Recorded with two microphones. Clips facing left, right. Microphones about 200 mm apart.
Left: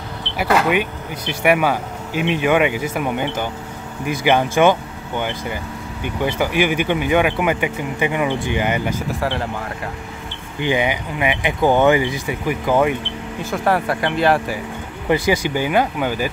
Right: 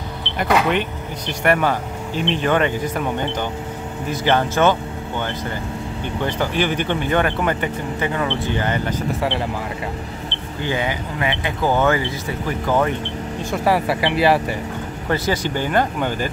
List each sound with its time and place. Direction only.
0.4 s speech: 5° left (ahead or behind)
9.2 s speech: centre (ahead or behind)
10.6 s speech: 15° left (ahead or behind)
13.4 s speech: centre (ahead or behind)
15.0 s speech: 10° left (ahead or behind)